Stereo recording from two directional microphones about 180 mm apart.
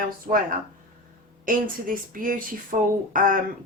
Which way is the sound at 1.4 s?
50° right (ahead or behind).